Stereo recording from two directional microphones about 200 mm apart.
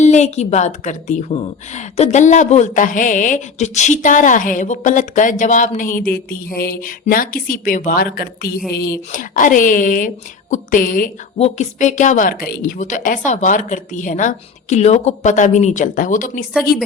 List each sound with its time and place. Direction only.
0.0 s a woman's voice: 35° left (ahead or behind)
11.3 s a woman's voice: 35° left (ahead or behind)